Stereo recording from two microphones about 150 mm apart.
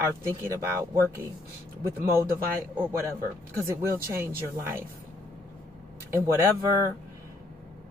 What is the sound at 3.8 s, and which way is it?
Speech, 15° right (ahead or behind).